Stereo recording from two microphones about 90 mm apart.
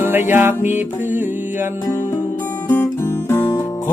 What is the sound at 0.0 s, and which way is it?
Music, 25° right (ahead or behind).